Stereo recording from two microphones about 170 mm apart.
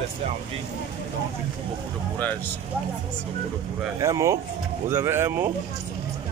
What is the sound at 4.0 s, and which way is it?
Speech, 20° right (ahead or behind).